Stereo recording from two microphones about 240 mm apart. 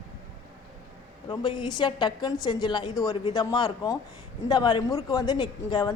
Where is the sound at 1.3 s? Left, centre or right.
Centre.